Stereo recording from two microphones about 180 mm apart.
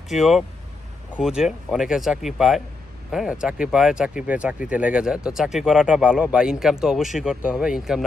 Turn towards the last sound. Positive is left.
turn(degrees=0)  # may be behind; listen again after turning